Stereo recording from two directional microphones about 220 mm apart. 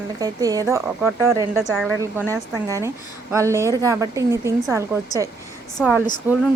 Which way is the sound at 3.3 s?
15° right (ahead or behind).